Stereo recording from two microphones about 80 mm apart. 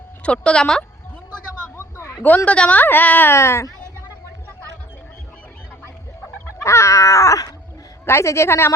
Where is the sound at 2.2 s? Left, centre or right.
Centre.